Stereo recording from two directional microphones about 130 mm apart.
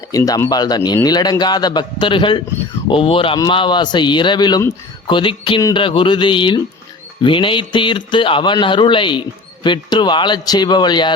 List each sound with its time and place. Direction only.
0.1 s a man's voice: 25° left (ahead or behind)